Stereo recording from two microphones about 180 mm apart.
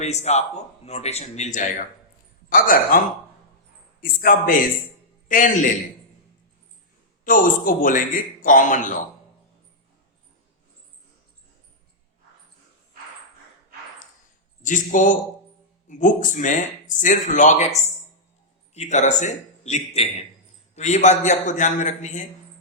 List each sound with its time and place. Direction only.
0.0 s a man's voice: 35° left (ahead or behind)
4.0 s speech: 50° left (ahead or behind)
7.3 s speech: 50° left (ahead or behind)
14.6 s a man's voice: 45° left (ahead or behind)